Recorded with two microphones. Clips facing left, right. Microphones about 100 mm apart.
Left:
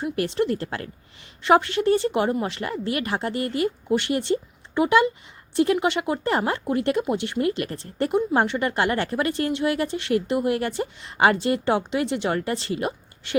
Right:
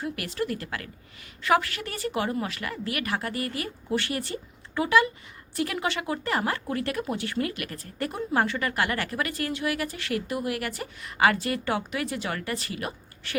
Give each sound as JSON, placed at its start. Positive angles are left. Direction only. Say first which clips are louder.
{"t": 0.0, "sound": "speech", "louder": "left 7 dB", "side_deg": 25}